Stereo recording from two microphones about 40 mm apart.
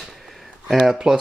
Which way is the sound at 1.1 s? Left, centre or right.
Centre.